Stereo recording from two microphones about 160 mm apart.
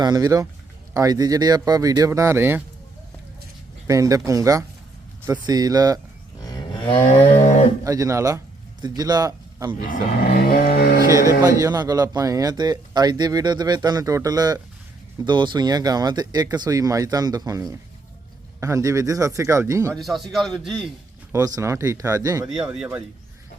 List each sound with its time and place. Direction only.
0.0 s speech: 25° right (ahead or behind)
3.8 s speech: 20° right (ahead or behind)
6.4 s cattle: 30° left (ahead or behind)
7.9 s speech: 20° right (ahead or behind)
10.2 s a sound: 65° left (ahead or behind)
11.1 s speech: 20° right (ahead or behind)
19.9 s a man's voice: centre (ahead or behind)
21.3 s speech: 20° right (ahead or behind)